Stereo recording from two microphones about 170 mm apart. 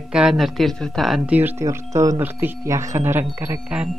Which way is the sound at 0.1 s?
5° right (ahead or behind).